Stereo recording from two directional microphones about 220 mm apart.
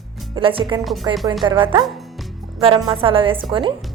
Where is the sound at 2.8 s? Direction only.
25° right (ahead or behind).